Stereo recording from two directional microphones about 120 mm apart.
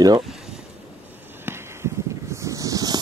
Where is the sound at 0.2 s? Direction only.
Centre (ahead or behind).